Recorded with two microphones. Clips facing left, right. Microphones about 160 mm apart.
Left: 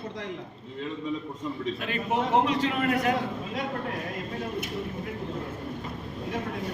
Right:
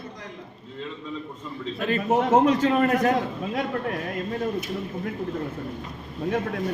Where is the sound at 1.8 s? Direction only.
40° right (ahead or behind).